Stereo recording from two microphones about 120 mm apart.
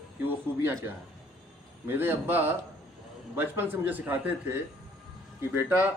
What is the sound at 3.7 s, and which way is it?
Speech, 15° right (ahead or behind).